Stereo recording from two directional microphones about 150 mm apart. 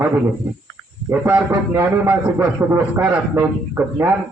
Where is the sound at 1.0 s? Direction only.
15° right (ahead or behind).